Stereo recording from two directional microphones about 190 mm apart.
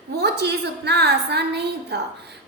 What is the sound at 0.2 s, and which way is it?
A woman's voice, 60° right (ahead or behind).